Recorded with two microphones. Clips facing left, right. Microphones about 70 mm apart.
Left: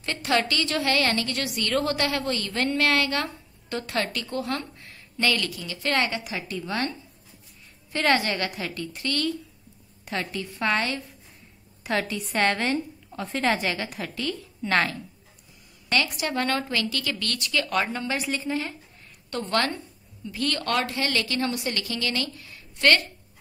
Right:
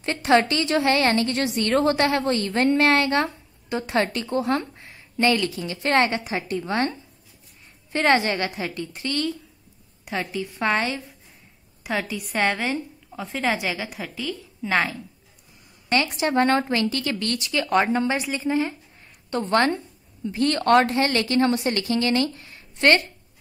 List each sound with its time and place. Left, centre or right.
0.0 s a woman's voice: right
11.8 s a woman's voice: centre
15.9 s a woman's voice: right